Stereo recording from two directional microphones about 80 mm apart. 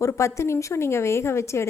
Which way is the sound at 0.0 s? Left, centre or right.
Left.